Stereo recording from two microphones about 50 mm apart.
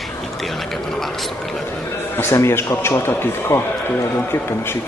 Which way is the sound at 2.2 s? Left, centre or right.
Left.